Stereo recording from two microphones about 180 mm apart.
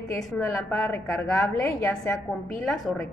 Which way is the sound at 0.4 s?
10° left (ahead or behind).